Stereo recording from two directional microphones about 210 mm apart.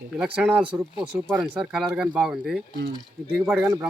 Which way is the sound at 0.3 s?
5° right (ahead or behind).